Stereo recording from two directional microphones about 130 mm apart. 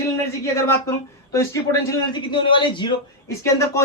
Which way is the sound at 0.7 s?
20° left (ahead or behind).